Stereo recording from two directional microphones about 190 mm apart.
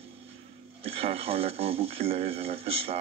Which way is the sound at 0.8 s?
30° right (ahead or behind).